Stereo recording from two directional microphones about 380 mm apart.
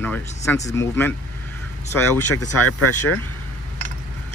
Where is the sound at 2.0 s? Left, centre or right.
Left.